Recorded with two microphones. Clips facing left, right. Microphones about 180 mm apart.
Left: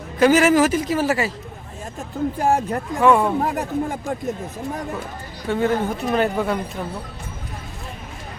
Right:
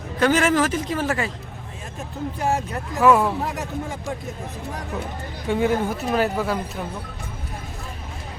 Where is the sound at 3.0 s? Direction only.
5° right (ahead or behind).